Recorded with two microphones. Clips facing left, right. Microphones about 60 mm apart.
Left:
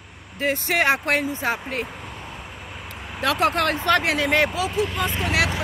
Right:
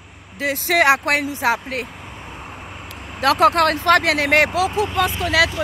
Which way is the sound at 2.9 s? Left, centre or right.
Centre.